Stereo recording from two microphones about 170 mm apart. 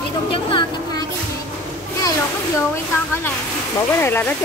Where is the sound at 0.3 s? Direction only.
30° left (ahead or behind).